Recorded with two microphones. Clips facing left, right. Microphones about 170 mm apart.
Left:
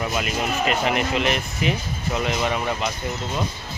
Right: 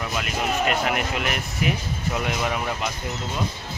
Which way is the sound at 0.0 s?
5° left (ahead or behind).